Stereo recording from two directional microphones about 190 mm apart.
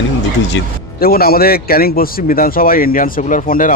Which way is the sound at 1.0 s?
50° left (ahead or behind).